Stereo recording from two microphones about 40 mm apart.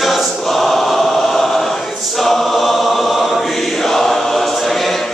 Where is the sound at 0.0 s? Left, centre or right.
Centre.